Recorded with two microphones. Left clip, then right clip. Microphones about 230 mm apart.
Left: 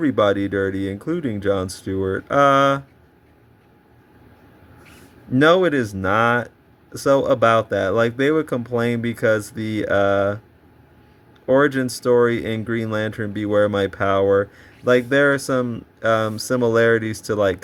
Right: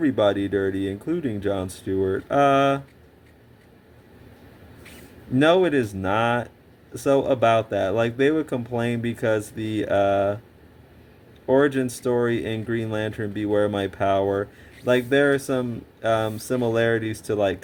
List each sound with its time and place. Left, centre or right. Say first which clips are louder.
0.0 s speech: left 3 dB; left
5.4 s speech: left 3 dB; left
11.4 s speech: left 3 dB; left